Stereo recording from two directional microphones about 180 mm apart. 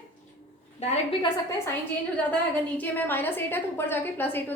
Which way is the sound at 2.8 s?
10° left (ahead or behind).